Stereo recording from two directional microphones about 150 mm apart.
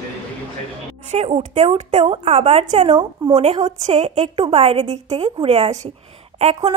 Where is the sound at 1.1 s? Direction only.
45° right (ahead or behind).